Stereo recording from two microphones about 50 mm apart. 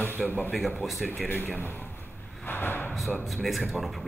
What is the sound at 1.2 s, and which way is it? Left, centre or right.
Speech, left.